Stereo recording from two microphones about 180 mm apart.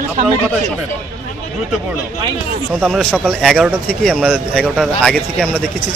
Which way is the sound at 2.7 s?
5° right (ahead or behind).